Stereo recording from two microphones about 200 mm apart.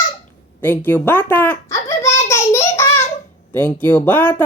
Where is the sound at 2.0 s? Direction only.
15° left (ahead or behind).